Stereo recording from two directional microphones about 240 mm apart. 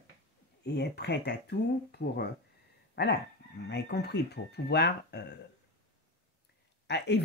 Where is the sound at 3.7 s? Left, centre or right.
Left.